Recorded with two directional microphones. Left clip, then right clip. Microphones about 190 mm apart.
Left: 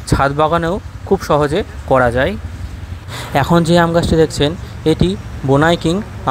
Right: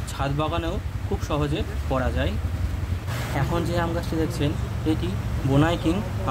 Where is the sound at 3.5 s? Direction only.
35° left (ahead or behind).